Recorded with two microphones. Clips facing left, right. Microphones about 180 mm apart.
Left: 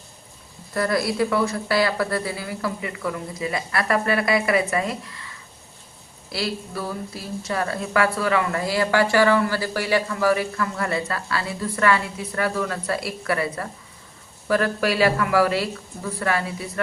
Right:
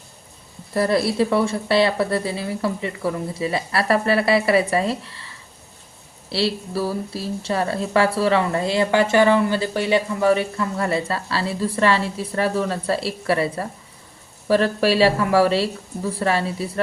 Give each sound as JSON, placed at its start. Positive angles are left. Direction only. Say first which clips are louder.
{"t": 0.7, "sound": "speech", "louder": "right 3 dB", "side_deg": -25}
{"t": 6.3, "sound": "speech", "louder": "right 5 dB", "side_deg": -30}